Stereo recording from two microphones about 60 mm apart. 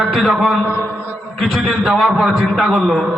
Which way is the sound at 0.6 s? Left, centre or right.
Right.